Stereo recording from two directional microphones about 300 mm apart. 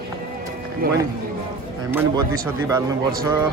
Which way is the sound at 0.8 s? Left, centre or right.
Right.